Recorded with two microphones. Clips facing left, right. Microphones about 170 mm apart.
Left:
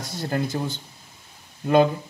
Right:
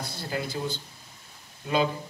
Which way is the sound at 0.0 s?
50° left (ahead or behind).